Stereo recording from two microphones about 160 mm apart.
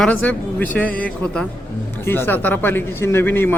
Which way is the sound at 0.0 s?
10° left (ahead or behind).